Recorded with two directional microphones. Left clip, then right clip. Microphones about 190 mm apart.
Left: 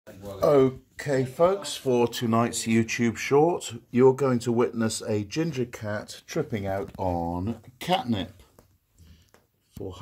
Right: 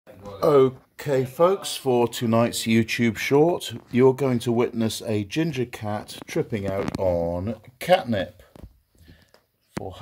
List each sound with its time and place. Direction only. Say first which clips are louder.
0.4 s speech: right 2 dB; 30° right (ahead or behind)